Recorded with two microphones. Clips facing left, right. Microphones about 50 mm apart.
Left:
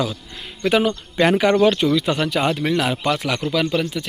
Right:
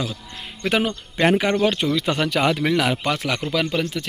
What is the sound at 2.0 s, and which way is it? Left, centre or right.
Speech, right.